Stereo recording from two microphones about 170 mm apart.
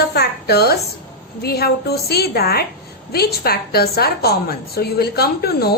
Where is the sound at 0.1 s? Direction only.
70° left (ahead or behind).